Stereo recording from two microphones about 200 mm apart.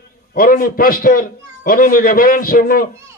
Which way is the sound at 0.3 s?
45° left (ahead or behind).